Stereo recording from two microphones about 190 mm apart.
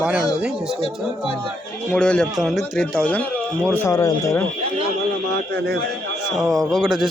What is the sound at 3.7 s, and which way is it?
Speech, 15° left (ahead or behind).